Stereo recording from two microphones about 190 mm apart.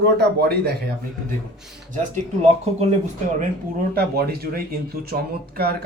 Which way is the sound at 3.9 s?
55° right (ahead or behind).